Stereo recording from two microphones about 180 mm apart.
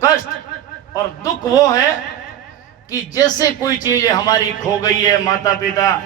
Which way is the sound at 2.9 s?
20° left (ahead or behind).